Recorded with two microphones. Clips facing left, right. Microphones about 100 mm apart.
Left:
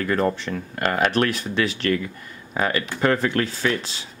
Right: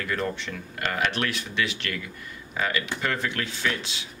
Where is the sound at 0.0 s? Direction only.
40° left (ahead or behind).